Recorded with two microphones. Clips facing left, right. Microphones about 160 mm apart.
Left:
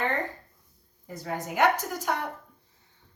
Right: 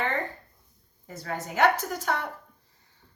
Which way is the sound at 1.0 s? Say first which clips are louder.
Left 1 dB; 15° left (ahead or behind).